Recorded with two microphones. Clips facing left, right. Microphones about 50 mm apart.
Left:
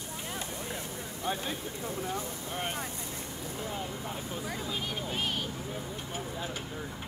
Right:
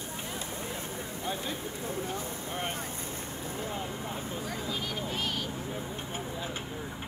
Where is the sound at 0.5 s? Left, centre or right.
Right.